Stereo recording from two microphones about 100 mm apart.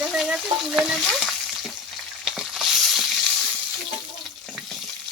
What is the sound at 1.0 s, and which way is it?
Frying, centre (ahead or behind).